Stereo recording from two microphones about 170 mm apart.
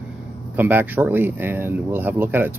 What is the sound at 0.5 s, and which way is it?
Speech, 10° right (ahead or behind).